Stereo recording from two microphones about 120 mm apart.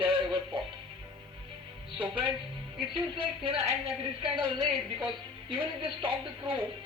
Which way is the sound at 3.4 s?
60° right (ahead or behind).